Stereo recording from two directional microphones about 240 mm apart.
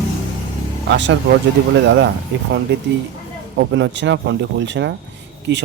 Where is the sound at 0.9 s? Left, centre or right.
Right.